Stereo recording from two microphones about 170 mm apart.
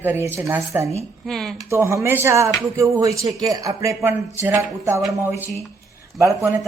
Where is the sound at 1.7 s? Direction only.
15° right (ahead or behind).